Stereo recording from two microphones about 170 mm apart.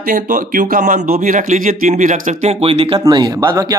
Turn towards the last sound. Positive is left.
turn(degrees=-25)  # may be behind; listen again after turning